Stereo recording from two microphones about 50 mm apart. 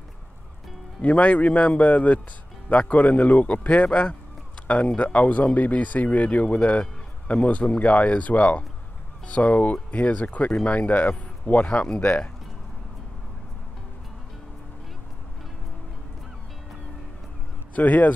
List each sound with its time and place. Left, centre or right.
1.0 s speech: left
11.6 s speech: left
17.7 s speech: left